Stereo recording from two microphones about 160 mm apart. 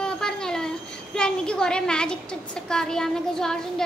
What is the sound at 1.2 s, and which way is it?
A child's voice, 5° left (ahead or behind).